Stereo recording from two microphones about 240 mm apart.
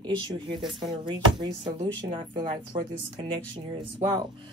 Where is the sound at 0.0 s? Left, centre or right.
Centre.